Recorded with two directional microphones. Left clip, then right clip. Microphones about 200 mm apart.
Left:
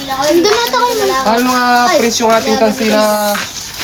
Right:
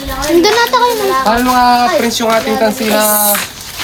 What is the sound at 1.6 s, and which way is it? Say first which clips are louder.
Speech: even; 15° right (ahead or behind).